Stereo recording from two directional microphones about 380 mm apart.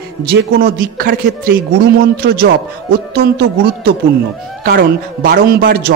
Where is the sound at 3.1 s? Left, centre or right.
Right.